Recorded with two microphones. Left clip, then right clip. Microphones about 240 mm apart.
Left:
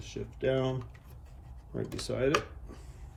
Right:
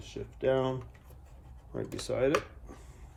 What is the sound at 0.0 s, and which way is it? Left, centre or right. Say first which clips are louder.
Speech: right 1 dB; centre.